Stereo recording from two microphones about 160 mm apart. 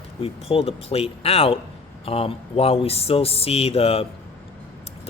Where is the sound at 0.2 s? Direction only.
35° left (ahead or behind).